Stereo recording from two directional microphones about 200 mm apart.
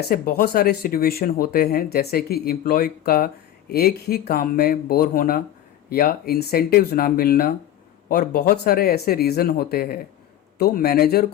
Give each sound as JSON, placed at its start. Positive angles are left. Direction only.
{"t": 0.1, "sound": "speech", "side_deg": 50}